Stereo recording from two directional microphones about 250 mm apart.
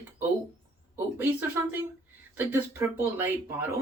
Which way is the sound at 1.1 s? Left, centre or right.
Centre.